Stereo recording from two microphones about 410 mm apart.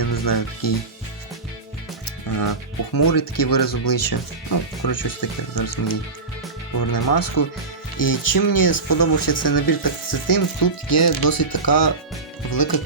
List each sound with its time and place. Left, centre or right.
0.0 s speech: left
2.3 s speech: left